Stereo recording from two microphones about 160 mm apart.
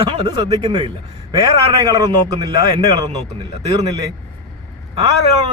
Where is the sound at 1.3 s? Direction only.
25° right (ahead or behind).